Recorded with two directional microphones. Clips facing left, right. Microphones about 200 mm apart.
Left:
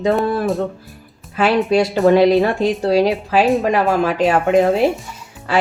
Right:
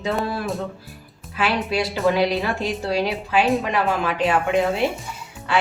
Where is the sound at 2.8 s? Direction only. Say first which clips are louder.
Left 9 dB; 40° left (ahead or behind).